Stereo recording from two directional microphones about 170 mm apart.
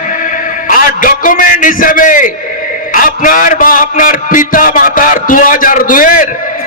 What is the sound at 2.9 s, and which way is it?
A man's voice, 50° left (ahead or behind).